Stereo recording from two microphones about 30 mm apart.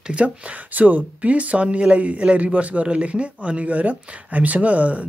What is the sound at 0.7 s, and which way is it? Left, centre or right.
Speech, right.